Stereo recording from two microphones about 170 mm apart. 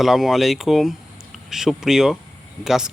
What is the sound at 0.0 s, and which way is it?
Speech, centre (ahead or behind).